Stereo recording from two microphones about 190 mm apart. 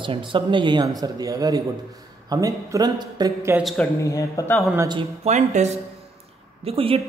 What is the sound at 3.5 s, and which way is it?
Speech, centre (ahead or behind).